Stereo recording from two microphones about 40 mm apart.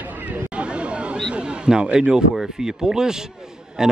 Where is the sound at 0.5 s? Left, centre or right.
Right.